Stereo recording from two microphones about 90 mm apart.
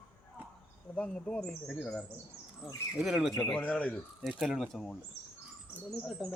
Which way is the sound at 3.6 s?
15° left (ahead or behind).